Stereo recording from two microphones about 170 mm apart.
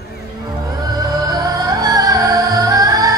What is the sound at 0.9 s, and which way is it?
Music, 20° right (ahead or behind).